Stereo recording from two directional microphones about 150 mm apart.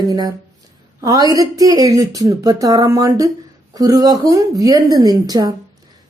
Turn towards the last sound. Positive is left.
turn(degrees=-25)  # may be behind; listen again after turning